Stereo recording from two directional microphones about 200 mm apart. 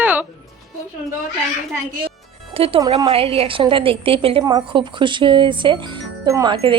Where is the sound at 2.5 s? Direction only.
30° right (ahead or behind).